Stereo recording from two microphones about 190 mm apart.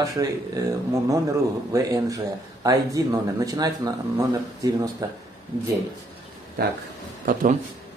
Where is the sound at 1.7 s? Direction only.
20° right (ahead or behind).